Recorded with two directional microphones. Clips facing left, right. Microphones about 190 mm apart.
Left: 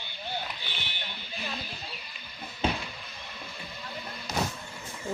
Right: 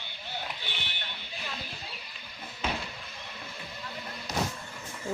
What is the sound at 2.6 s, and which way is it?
Basketball bounce, 30° left (ahead or behind).